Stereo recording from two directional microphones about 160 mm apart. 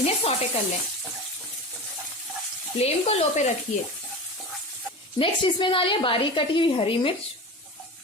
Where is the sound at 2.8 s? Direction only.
40° left (ahead or behind).